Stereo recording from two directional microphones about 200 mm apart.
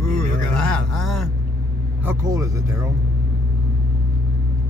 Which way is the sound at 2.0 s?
15° right (ahead or behind).